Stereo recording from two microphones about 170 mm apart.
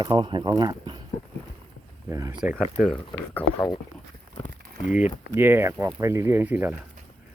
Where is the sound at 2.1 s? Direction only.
20° right (ahead or behind).